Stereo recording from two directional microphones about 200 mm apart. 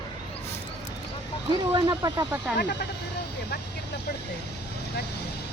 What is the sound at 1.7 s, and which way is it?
Speech, 20° right (ahead or behind).